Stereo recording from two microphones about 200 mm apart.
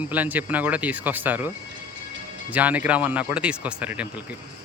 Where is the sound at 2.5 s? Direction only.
5° right (ahead or behind).